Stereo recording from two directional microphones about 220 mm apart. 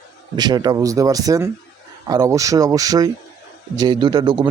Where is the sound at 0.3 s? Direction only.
20° right (ahead or behind).